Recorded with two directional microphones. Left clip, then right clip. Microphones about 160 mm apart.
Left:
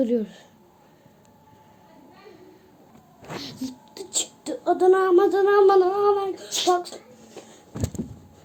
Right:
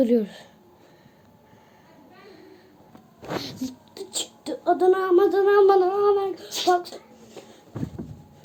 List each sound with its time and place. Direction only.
0.0 s speech: 40° right (ahead or behind)
3.2 s a sound: 25° right (ahead or behind)
3.9 s speech: 5° left (ahead or behind)